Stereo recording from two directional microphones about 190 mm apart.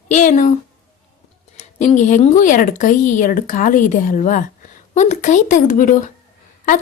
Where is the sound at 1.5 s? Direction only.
35° left (ahead or behind).